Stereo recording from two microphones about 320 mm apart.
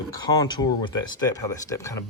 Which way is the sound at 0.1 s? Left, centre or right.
Centre.